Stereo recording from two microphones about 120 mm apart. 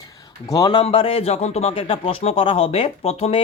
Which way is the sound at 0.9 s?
50° left (ahead or behind).